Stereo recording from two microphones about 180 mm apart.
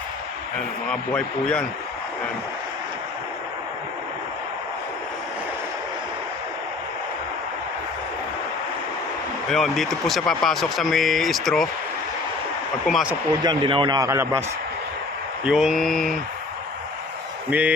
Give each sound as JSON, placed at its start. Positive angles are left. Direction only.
{"t": 0.9, "sound": "speech", "side_deg": 5}
{"t": 9.5, "sound": "speech", "side_deg": 0}
{"t": 12.9, "sound": "speech", "side_deg": -5}
{"t": 13.4, "sound": "a man's voice", "side_deg": -25}
{"t": 15.4, "sound": "speech", "side_deg": 0}
{"t": 17.5, "sound": "speech", "side_deg": -10}